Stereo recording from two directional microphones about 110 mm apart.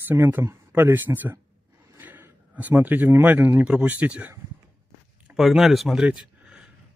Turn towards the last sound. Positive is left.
turn(degrees=-5)  # may be behind; listen again after turning